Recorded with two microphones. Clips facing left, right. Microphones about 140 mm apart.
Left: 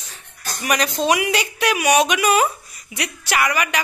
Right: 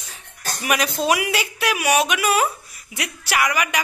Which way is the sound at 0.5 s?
5° right (ahead or behind).